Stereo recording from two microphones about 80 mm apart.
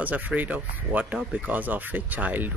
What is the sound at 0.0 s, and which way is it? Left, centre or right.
Speech, centre.